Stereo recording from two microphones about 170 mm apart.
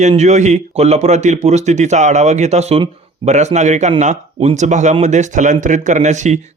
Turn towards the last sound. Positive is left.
turn(degrees=-45)  # may be behind; listen again after turning